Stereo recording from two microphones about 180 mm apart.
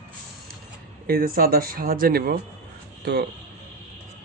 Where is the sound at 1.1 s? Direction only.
55° right (ahead or behind).